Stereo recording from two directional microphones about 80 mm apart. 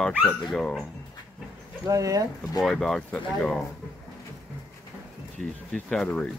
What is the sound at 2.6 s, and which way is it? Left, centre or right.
Speech, centre.